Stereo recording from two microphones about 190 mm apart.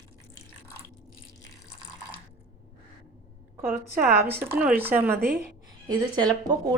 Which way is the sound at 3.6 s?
10° right (ahead or behind).